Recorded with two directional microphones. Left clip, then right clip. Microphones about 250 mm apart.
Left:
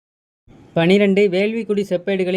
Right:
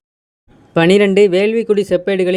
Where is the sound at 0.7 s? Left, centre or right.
Right.